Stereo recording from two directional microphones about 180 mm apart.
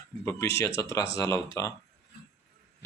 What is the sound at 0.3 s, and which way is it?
Speech, 15° left (ahead or behind).